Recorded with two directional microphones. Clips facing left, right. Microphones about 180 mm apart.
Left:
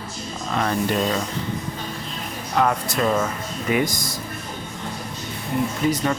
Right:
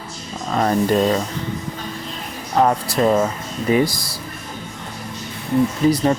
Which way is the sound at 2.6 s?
35° right (ahead or behind).